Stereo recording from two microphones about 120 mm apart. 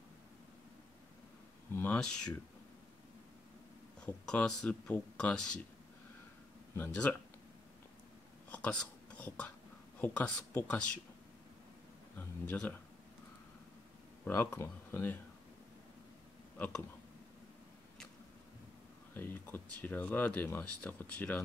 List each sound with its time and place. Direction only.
1.7 s a sound: 15° left (ahead or behind)
2.0 s speech: 5° left (ahead or behind)
4.0 s speech: 5° left (ahead or behind)
6.7 s speech: 15° left (ahead or behind)
8.5 s a sound: 10° left (ahead or behind)
9.9 s speech: 15° left (ahead or behind)
12.2 s speech: 15° left (ahead or behind)
14.2 s speech: 20° left (ahead or behind)
19.1 s speech: 15° left (ahead or behind)